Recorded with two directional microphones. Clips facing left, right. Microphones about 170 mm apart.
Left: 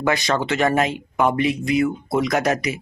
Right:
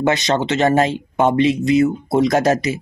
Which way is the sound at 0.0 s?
25° right (ahead or behind).